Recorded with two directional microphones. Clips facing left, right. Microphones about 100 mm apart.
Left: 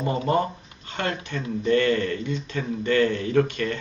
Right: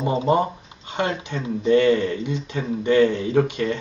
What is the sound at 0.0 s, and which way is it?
Speech, 20° right (ahead or behind).